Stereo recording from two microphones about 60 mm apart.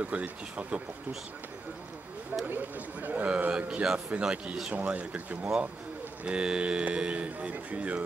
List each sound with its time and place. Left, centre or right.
0.0 s speech: right
2.4 s speech: right
3.3 s speech: right